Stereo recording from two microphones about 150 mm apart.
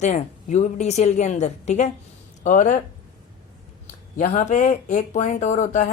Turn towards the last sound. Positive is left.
turn(degrees=55)  # may be behind; listen again after turning